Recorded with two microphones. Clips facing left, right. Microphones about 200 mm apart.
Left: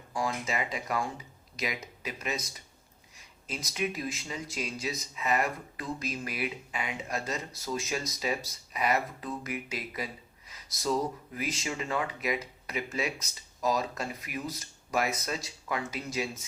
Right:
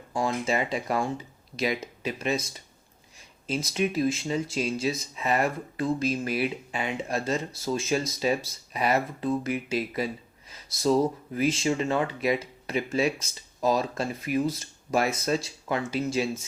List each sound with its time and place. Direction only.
0.1 s speech: 25° right (ahead or behind)